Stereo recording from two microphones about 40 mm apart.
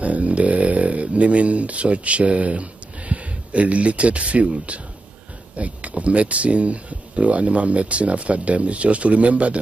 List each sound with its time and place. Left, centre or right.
0.0 s speech: right